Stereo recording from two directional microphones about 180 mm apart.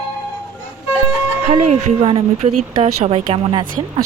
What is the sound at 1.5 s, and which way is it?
Speech, 40° right (ahead or behind).